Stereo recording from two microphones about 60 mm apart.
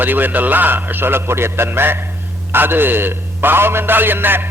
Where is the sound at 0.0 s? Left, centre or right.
Right.